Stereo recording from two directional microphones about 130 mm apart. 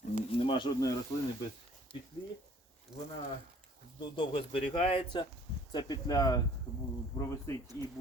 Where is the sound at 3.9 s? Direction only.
40° left (ahead or behind).